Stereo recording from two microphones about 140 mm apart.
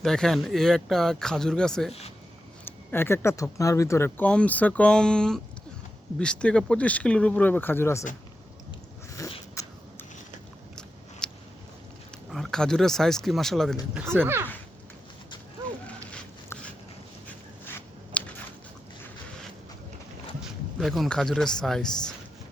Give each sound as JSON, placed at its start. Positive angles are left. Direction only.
{"t": 0.0, "sound": "speech", "side_deg": 5}
{"t": 1.9, "sound": "speech", "side_deg": 50}
{"t": 2.6, "sound": "speech", "side_deg": 15}
{"t": 9.6, "sound": "a sound", "side_deg": 20}
{"t": 11.2, "sound": "a sound", "side_deg": 5}
{"t": 12.3, "sound": "speech", "side_deg": 5}
{"t": 16.5, "sound": "a sound", "side_deg": 10}
{"t": 17.7, "sound": "scissors", "side_deg": 10}
{"t": 20.4, "sound": "speech", "side_deg": 0}